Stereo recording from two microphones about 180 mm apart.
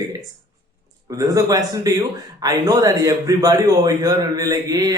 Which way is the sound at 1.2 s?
20° right (ahead or behind).